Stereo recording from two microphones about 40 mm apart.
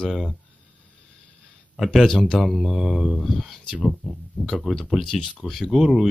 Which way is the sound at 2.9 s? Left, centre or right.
Centre.